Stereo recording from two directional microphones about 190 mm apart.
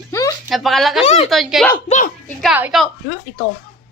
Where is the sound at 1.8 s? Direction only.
40° left (ahead or behind).